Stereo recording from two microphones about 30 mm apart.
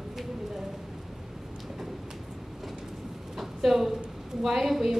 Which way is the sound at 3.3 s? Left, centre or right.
Centre.